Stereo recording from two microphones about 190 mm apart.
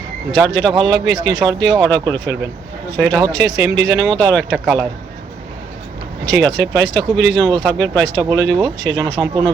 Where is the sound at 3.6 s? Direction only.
65° right (ahead or behind).